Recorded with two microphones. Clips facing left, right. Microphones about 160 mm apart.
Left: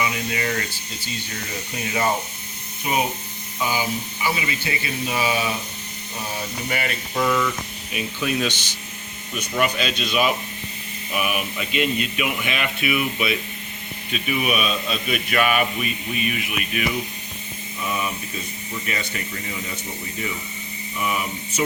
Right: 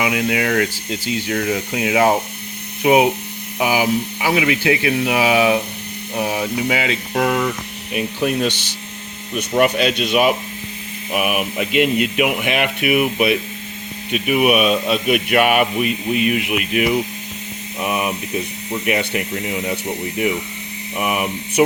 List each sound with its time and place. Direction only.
0.0 s speech: 80° right
2.8 s speech: 75° right (ahead or behind)
3.6 s speech: 90° right
6.1 s speech: 75° right (ahead or behind)
9.3 s speech: 50° right (ahead or behind); by 17.0 s 65° right (ahead or behind)
17.7 s a sound: 70° right (ahead or behind)
18.7 s speech: 70° right (ahead or behind)